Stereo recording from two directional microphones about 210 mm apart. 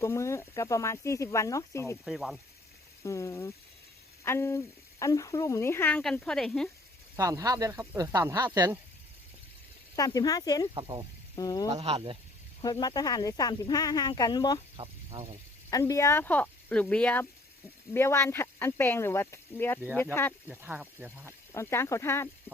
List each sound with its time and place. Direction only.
0.0 s speech: 15° left (ahead or behind)
2.0 s speech: centre (ahead or behind)
3.0 s speech: 15° left (ahead or behind)
7.2 s speech: 15° right (ahead or behind)
9.9 s speech: 15° left (ahead or behind)
10.8 s speech: 25° right (ahead or behind)
11.3 s speech: 15° left (ahead or behind)
11.7 s speech: 25° right (ahead or behind)
12.8 s speech: 20° left (ahead or behind)
15.7 s speech: 15° left (ahead or behind)
20.5 s speech: 10° right (ahead or behind)
21.5 s speech: 10° left (ahead or behind)